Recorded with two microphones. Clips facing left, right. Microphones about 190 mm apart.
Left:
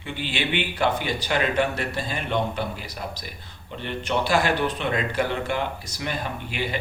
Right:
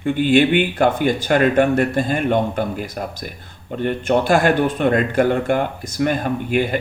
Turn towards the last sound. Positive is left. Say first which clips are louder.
# right 10 dB
turn(degrees=-50)  # may be behind; listen again after turning